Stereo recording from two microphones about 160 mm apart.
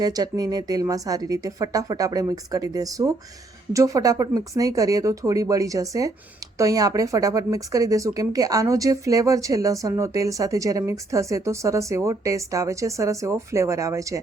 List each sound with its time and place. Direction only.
0.0 s speech: 25° right (ahead or behind)